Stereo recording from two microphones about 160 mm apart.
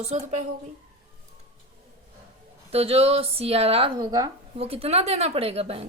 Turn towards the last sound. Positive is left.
turn(degrees=-40)  # may be behind; listen again after turning